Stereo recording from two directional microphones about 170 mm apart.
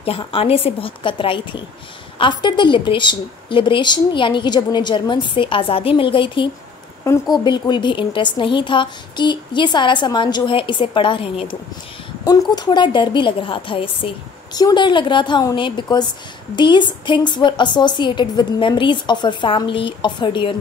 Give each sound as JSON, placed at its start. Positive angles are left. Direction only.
{"t": 0.0, "sound": "a woman's voice", "side_deg": 35}